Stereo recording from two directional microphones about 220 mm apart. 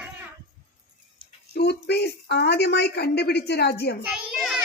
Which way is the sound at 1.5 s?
45° left (ahead or behind).